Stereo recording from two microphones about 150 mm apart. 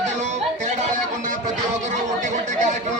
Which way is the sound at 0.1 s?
50° right (ahead or behind).